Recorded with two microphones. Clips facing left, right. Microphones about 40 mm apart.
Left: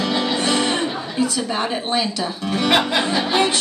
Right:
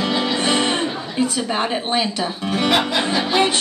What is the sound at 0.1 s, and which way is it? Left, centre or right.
Music, centre.